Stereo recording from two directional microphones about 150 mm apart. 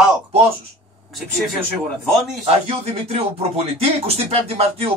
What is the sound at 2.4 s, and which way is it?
A man's voice, 45° right (ahead or behind).